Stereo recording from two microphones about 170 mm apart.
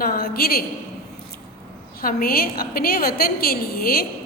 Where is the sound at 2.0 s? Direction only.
60° left (ahead or behind).